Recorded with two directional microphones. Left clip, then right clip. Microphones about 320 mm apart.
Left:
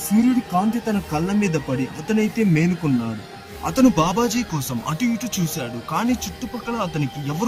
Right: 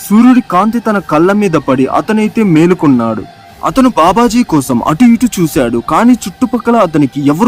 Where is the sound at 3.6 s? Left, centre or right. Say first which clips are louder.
Right 10 dB; centre.